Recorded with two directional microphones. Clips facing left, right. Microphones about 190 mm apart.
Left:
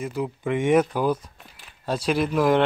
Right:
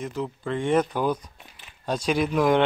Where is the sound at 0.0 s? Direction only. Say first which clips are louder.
Left 3 dB; 10° left (ahead or behind).